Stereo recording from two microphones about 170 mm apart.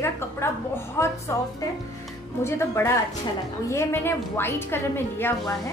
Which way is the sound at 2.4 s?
15° left (ahead or behind).